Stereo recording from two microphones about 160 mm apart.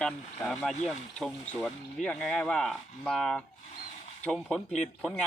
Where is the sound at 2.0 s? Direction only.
5° left (ahead or behind).